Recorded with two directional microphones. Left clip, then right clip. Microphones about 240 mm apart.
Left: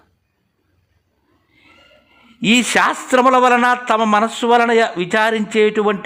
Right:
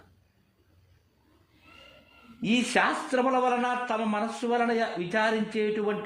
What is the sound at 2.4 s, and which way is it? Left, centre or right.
A man's voice, left.